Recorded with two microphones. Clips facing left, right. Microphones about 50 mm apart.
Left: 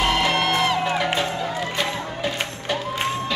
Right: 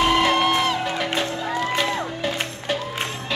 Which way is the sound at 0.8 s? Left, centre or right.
Centre.